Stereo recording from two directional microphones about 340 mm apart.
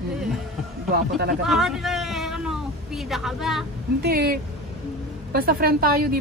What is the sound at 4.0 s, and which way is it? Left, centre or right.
A woman's voice, right.